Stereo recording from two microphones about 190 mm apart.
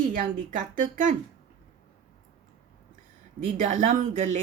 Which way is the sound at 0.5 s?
40° right (ahead or behind).